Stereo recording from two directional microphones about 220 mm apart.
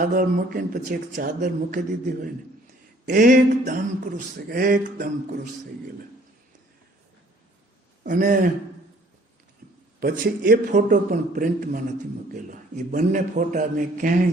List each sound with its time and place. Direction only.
0.0 s speech: 40° right (ahead or behind)
8.0 s speech: 40° right (ahead or behind)
10.0 s speech: 40° right (ahead or behind)